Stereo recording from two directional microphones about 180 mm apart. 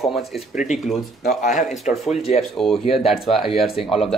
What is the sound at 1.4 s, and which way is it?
Speech, 45° left (ahead or behind).